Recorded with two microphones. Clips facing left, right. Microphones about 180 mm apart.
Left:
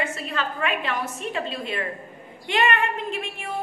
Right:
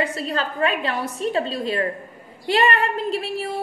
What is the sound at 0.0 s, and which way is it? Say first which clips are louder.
A woman's voice: right 4 dB; 35° right (ahead or behind).